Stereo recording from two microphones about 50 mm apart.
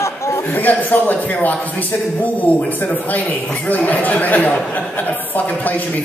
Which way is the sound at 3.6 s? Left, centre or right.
Left.